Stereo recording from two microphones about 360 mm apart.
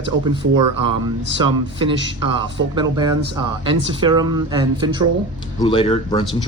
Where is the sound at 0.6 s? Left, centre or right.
Right.